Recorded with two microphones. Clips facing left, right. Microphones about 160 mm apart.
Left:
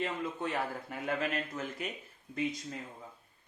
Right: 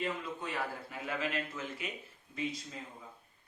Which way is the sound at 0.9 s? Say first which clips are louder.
Left 3 dB; 45° left (ahead or behind).